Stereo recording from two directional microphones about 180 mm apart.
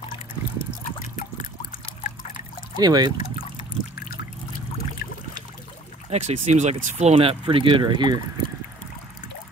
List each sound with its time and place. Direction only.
0.8 s a sound: 45° left (ahead or behind)
2.8 s speech: 20° right (ahead or behind)
3.2 s trickle: 45° left (ahead or behind)
6.0 s speech: 40° right (ahead or behind)